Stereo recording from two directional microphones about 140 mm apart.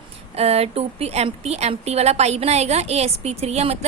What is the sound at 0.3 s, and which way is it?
A woman's voice, 45° right (ahead or behind).